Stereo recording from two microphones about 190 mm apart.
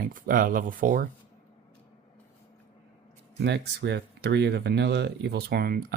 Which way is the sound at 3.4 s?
60° right (ahead or behind).